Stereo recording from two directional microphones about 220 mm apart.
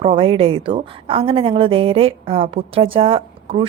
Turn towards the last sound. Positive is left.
turn(degrees=-25)  # may be behind; listen again after turning